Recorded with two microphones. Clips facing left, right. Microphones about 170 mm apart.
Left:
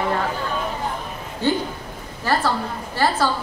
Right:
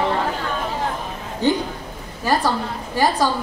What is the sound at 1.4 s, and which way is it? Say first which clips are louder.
A woman's voice: right 2 dB; 15° right (ahead or behind).